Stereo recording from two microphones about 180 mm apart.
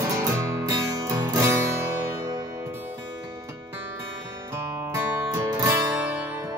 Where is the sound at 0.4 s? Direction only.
15° right (ahead or behind).